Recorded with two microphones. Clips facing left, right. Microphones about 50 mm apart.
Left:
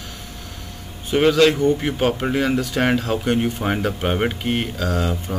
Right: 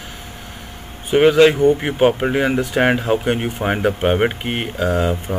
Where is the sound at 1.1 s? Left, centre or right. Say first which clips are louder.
Right 4 dB; centre.